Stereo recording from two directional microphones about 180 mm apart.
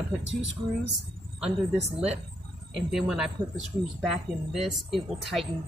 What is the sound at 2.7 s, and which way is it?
Speech, 5° right (ahead or behind).